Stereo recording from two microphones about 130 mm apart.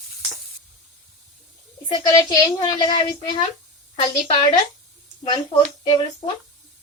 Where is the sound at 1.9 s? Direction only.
30° left (ahead or behind).